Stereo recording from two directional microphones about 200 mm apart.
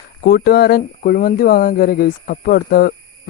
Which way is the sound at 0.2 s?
50° left (ahead or behind).